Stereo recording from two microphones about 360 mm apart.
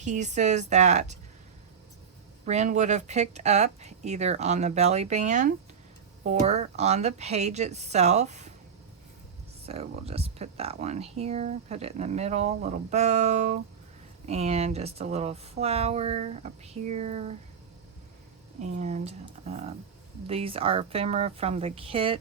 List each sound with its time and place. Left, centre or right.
0.0 s speech: centre
2.5 s speech: centre
9.6 s speech: centre
18.6 s speech: centre